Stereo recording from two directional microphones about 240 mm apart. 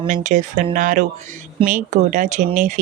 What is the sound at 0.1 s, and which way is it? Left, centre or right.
Speech, right.